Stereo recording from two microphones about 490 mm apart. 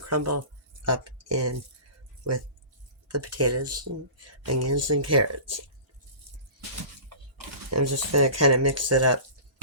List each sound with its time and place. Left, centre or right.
0.0 s speech: right
3.1 s speech: right
7.3 s a sound: right
8.1 s speech: right